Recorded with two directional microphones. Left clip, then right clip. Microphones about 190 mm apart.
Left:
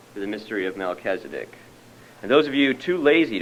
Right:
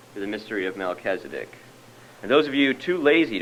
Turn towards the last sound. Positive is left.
turn(degrees=-30)  # may be behind; listen again after turning